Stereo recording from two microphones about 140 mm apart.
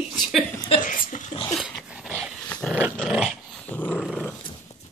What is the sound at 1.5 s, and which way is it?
Dog, 5° right (ahead or behind).